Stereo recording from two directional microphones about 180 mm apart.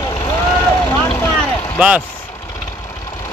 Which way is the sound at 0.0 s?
25° left (ahead or behind).